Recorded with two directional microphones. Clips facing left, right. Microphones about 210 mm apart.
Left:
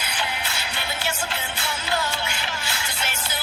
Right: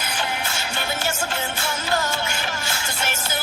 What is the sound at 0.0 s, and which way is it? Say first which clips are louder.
Music: right 3 dB; 45° right (ahead or behind).